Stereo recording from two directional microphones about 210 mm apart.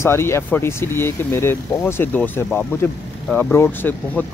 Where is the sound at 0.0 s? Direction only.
10° left (ahead or behind).